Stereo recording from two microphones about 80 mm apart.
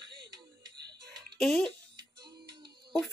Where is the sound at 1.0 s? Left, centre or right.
Centre.